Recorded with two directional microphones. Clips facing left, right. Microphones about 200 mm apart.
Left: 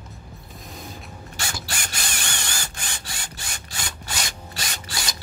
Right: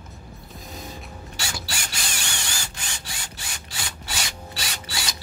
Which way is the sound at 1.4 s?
50° left (ahead or behind).